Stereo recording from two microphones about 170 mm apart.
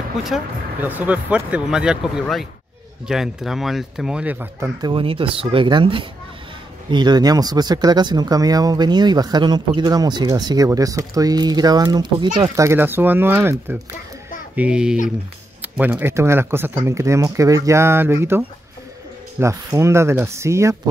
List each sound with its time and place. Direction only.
0.2 s speech: 5° right (ahead or behind)
4.8 s speech: 30° right (ahead or behind); by 18.4 s 15° right (ahead or behind)
19.4 s speech: 15° right (ahead or behind)